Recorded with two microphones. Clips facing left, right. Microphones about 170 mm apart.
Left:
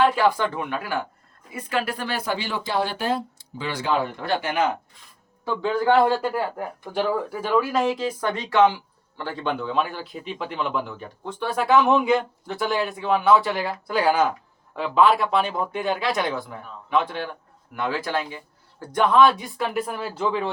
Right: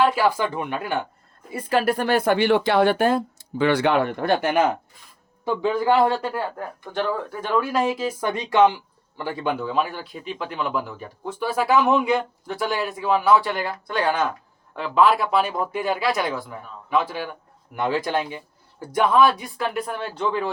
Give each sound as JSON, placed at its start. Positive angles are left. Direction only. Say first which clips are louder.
{"t": 0.0, "sound": "speech", "louder": "even", "side_deg": -10}
{"t": 1.5, "sound": "speech", "louder": "right 6 dB", "side_deg": -40}
{"t": 5.7, "sound": "speech", "louder": "left 2 dB", "side_deg": 0}
{"t": 17.7, "sound": "speech", "louder": "right 3 dB", "side_deg": -15}